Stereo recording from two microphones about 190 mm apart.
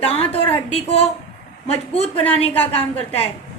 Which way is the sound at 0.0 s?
30° left (ahead or behind).